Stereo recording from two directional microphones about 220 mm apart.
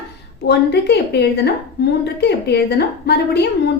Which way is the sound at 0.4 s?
50° left (ahead or behind).